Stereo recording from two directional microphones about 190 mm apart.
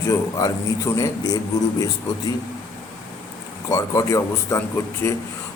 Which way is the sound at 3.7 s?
15° left (ahead or behind).